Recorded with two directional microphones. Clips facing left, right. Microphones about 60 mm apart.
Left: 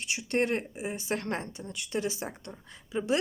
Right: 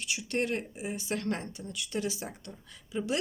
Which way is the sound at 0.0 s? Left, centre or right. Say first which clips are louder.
Left 3 dB; left.